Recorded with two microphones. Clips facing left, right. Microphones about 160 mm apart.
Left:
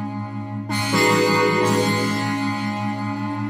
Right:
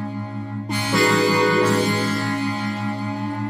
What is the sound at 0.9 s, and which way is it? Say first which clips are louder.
Music: even; 15° left (ahead or behind).